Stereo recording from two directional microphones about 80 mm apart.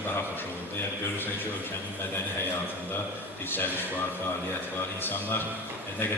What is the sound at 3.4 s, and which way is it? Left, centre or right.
Speech, left.